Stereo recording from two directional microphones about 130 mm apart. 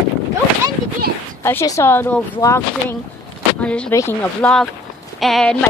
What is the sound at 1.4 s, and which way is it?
Speech, 20° left (ahead or behind).